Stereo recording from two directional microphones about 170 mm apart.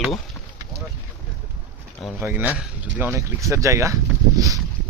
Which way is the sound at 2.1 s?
10° right (ahead or behind).